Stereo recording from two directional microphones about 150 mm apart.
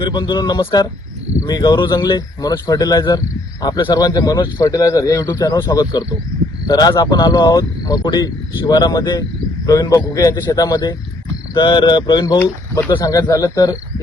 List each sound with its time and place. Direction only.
0.0 s speech: 30° left (ahead or behind)